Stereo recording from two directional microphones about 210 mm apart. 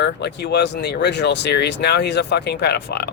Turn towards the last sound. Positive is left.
turn(degrees=50)  # may be behind; listen again after turning